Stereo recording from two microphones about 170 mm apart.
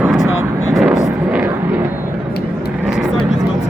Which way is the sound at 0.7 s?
5° right (ahead or behind).